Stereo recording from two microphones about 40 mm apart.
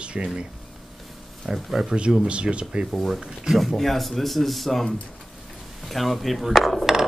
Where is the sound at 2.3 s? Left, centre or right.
Right.